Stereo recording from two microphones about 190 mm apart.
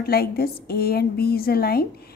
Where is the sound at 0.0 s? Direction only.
55° left (ahead or behind).